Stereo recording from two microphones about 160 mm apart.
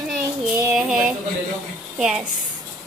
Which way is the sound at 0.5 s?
5° right (ahead or behind).